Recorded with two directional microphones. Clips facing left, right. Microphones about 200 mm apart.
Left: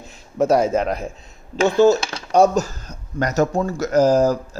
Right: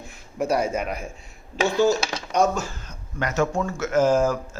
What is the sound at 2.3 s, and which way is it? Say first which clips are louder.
Speech: left 7 dB; 35° left (ahead or behind).